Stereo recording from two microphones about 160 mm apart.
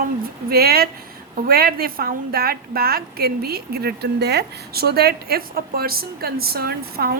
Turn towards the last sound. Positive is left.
turn(degrees=-75)  # may be behind; listen again after turning